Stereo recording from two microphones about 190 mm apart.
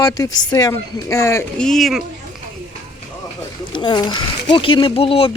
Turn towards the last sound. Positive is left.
turn(degrees=30)  # may be behind; listen again after turning